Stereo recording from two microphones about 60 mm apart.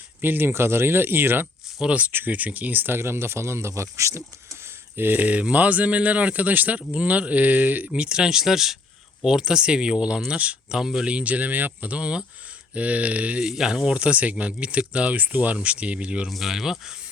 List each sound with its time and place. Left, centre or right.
0.2 s speech: right
1.8 s speech: right
4.9 s speech: right
8.0 s speech: centre
10.8 s speech: centre
13.4 s speech: centre
16.3 s speech: centre